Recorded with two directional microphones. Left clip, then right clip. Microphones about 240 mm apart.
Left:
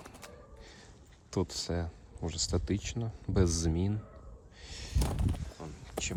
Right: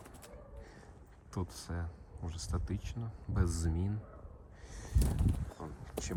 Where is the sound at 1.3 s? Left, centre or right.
Centre.